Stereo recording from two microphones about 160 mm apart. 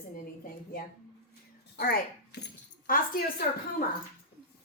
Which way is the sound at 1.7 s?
70° left (ahead or behind).